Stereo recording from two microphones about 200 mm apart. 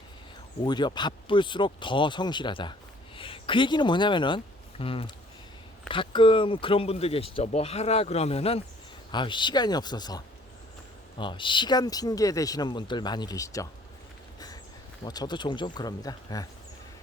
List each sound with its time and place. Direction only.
0.6 s speech: 20° left (ahead or behind)
14.3 s a sound: 20° left (ahead or behind)
15.0 s speech: 20° left (ahead or behind)